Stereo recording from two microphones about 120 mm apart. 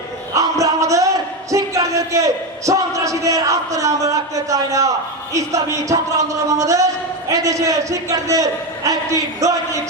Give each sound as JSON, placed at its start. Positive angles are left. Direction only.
{"t": 0.3, "sound": "a man's voice", "side_deg": -30}